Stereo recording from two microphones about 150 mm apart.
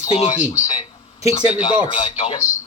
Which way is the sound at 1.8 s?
35° left (ahead or behind).